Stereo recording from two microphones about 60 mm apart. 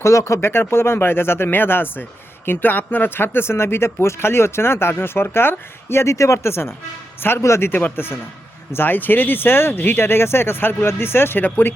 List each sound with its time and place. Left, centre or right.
0.0 s speech: left
0.5 s speech: left
7.4 s speech: left
7.7 s speech: left